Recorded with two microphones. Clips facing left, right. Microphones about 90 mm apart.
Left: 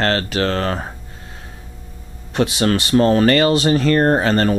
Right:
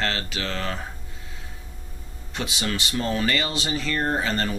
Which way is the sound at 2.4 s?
55° left (ahead or behind).